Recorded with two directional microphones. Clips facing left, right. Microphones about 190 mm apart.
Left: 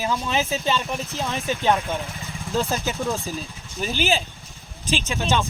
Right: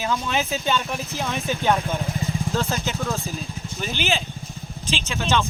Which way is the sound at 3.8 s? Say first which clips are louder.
Left 3 dB; 40° left (ahead or behind).